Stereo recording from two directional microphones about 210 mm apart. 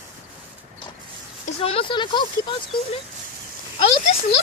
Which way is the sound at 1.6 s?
25° left (ahead or behind).